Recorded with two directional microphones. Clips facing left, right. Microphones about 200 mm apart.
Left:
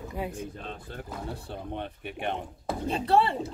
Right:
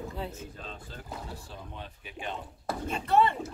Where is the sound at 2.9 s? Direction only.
30° left (ahead or behind).